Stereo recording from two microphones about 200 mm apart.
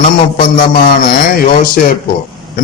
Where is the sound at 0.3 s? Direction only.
45° left (ahead or behind).